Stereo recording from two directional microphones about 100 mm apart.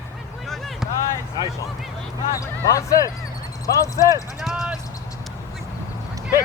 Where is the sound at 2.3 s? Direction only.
35° left (ahead or behind).